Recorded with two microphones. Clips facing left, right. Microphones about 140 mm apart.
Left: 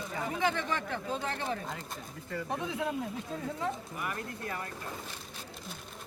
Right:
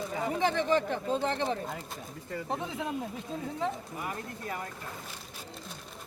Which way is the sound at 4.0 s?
25° right (ahead or behind).